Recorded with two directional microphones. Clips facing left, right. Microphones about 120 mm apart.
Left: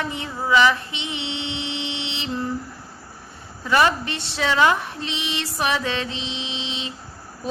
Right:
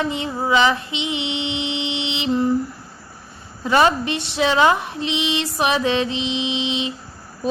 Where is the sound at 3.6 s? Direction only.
25° right (ahead or behind).